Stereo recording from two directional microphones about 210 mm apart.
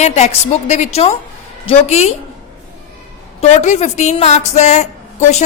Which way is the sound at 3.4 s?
35° left (ahead or behind).